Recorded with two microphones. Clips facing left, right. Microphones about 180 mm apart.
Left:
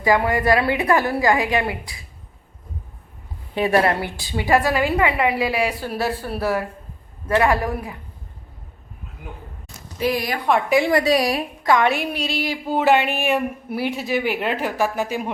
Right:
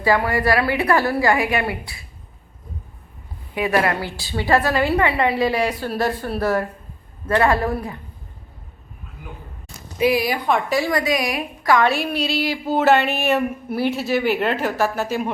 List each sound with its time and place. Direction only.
0.0 s a woman's voice: 20° left (ahead or behind)
3.5 s a woman's voice: 30° left (ahead or behind)
4.2 s a woman's voice: 15° left (ahead or behind)
10.0 s speech: 10° right (ahead or behind)
10.7 s a woman's voice: 25° left (ahead or behind)